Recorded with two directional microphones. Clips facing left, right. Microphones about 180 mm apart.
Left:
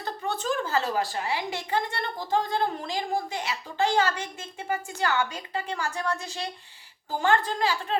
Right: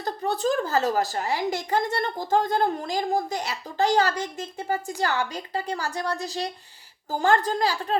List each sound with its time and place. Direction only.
0.0 s a woman's voice: 35° right (ahead or behind)